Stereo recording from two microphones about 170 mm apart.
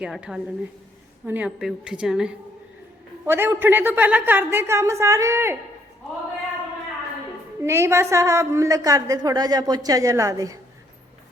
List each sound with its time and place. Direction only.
0.0 s a woman's voice: 5° right (ahead or behind)
7.6 s a woman's voice: 15° right (ahead or behind)